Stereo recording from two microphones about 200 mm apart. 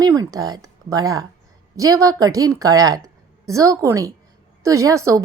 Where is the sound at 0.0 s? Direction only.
20° right (ahead or behind).